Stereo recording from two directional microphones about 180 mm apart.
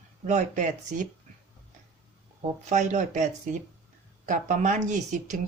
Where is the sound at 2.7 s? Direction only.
40° right (ahead or behind).